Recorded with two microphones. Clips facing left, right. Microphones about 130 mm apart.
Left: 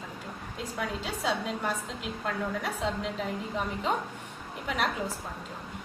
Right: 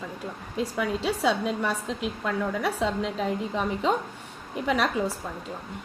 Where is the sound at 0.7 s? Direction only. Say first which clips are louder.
Right 6 dB; 75° right (ahead or behind).